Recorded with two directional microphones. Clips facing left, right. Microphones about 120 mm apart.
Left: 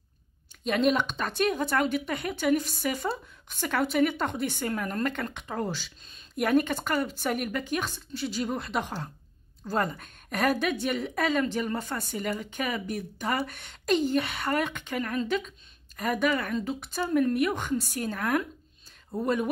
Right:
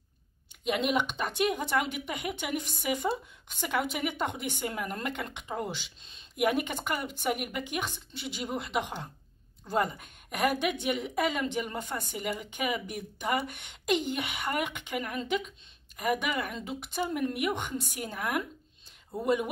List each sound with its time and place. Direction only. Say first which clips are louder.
0.7 s a woman's voice: left 4 dB; 15° right (ahead or behind)